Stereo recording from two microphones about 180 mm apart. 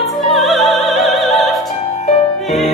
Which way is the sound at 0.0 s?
Centre (ahead or behind).